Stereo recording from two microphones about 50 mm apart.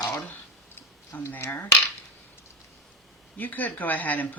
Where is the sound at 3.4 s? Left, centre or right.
Left.